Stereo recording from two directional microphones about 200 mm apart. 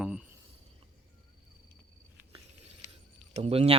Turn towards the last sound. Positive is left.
turn(degrees=-30)  # may be behind; listen again after turning